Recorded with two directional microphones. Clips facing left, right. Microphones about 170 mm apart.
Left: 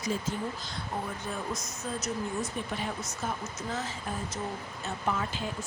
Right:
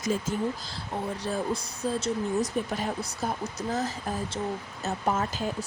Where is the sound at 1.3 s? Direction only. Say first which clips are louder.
Right 6 dB; 30° right (ahead or behind).